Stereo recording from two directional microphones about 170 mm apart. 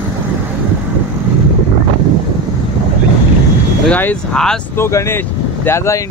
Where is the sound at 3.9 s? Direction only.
10° left (ahead or behind).